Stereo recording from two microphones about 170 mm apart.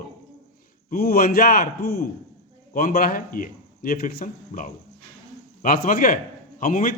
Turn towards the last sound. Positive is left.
turn(degrees=55)  # may be behind; listen again after turning